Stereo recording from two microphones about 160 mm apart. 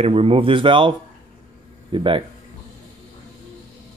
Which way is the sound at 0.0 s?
35° right (ahead or behind).